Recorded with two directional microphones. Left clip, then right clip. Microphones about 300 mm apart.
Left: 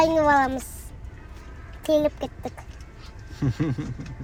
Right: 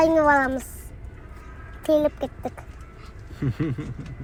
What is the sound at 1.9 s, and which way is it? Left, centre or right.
Speech, centre.